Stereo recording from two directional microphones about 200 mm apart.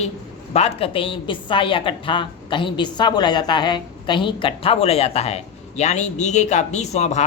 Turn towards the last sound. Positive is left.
turn(degrees=35)  # may be behind; listen again after turning